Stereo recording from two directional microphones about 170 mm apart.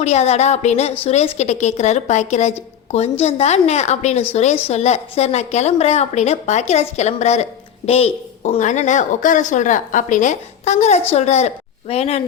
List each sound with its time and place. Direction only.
0.0 s a woman's voice: 40° left (ahead or behind)